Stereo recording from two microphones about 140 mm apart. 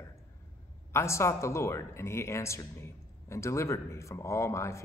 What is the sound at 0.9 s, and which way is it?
A man's voice, 20° left (ahead or behind).